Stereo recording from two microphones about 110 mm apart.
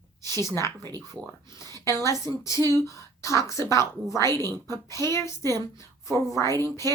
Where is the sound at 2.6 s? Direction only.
35° right (ahead or behind).